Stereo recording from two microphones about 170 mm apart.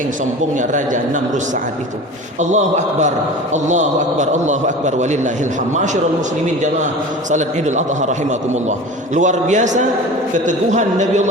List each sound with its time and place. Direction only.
0.5 s a man's voice: 50° right (ahead or behind)
2.4 s a man's voice: 45° right (ahead or behind)
7.3 s a man's voice: 45° right (ahead or behind)